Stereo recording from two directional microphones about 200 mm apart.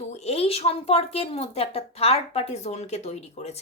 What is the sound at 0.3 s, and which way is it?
Speech, 30° left (ahead or behind).